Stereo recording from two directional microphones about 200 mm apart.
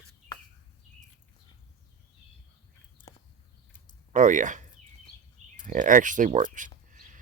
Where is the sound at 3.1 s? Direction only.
20° left (ahead or behind).